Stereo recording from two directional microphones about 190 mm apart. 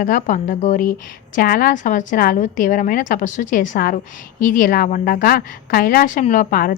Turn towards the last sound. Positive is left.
turn(degrees=45)  # may be behind; listen again after turning